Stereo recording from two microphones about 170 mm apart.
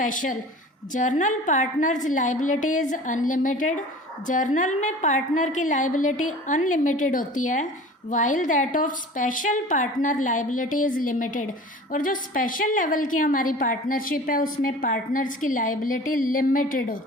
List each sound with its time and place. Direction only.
0.0 s a woman's voice: 50° left (ahead or behind)